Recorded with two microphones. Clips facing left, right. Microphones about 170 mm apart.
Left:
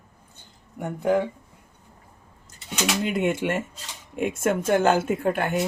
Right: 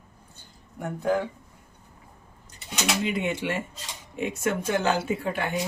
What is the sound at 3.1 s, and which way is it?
Speech, 50° left (ahead or behind).